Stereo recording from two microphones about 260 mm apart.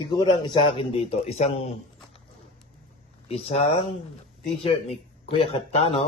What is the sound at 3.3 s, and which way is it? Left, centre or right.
Speech, left.